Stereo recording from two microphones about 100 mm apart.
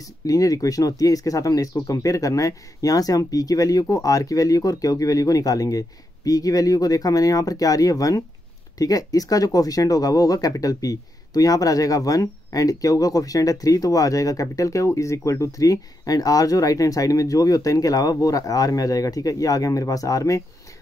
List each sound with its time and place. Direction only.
0.0 s speech: 35° left (ahead or behind)